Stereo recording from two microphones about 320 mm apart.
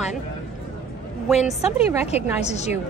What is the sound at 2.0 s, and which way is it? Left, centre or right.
Speech, centre.